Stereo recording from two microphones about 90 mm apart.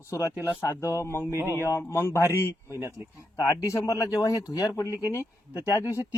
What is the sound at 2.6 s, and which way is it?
Speech, 30° right (ahead or behind).